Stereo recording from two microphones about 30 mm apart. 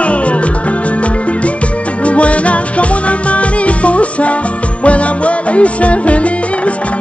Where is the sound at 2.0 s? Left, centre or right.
Left.